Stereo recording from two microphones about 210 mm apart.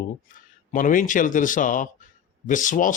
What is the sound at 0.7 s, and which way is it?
Speech, 40° left (ahead or behind).